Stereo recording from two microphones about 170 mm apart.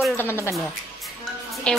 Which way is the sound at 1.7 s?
5° left (ahead or behind).